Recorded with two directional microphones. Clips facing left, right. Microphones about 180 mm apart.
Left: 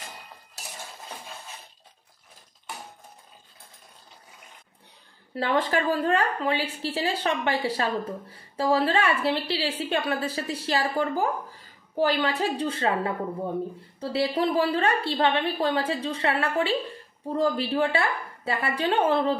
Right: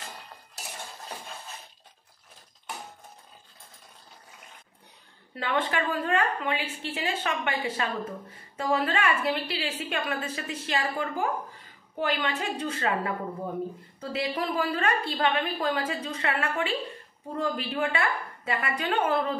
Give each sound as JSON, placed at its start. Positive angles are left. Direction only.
{"t": 5.3, "sound": "a woman's voice", "side_deg": 35}